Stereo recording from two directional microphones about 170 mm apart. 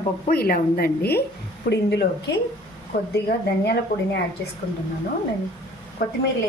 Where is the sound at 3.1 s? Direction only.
75° left (ahead or behind).